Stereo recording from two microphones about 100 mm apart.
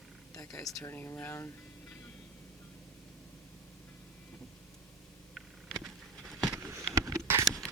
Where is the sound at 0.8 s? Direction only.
25° left (ahead or behind).